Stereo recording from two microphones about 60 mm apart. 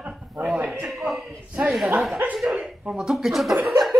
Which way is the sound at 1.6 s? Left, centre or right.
Right.